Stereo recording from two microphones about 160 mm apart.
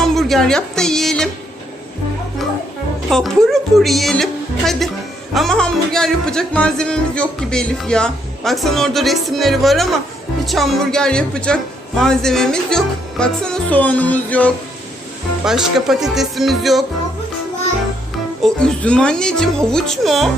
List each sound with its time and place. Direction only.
0.0 s speech: centre (ahead or behind)
3.1 s music: centre (ahead or behind)
15.4 s music: centre (ahead or behind)
18.4 s music: 5° left (ahead or behind)